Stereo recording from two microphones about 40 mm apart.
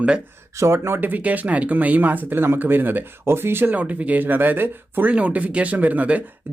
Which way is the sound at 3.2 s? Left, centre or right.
Right.